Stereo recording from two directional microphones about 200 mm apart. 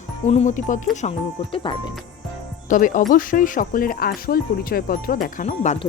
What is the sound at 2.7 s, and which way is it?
Speech, 40° left (ahead or behind).